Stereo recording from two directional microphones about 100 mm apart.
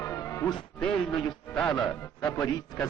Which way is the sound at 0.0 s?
30° left (ahead or behind).